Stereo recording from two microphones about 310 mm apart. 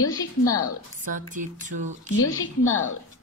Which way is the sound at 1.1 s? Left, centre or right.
Right.